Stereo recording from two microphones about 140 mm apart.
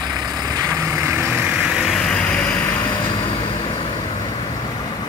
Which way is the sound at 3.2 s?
40° left (ahead or behind).